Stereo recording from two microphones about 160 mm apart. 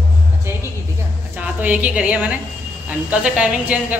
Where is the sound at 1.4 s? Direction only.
10° right (ahead or behind).